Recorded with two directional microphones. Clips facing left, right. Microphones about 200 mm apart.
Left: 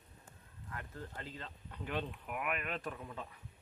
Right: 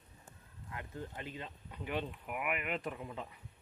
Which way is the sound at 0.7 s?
15° right (ahead or behind).